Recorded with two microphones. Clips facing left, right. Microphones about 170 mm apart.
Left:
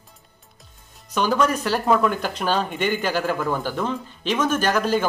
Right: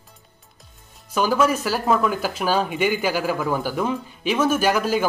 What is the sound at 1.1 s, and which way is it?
Speech, 5° right (ahead or behind).